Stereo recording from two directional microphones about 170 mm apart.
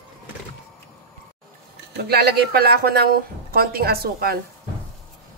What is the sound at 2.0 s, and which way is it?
A woman's voice, 65° right (ahead or behind).